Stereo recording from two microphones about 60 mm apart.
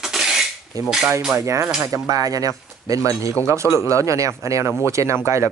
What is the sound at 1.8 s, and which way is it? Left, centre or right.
Speech, right.